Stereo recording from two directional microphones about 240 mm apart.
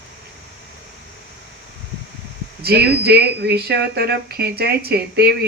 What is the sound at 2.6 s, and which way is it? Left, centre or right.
Speech, right.